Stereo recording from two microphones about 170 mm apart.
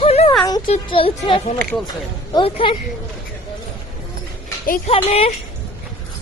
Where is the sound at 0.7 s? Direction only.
30° left (ahead or behind).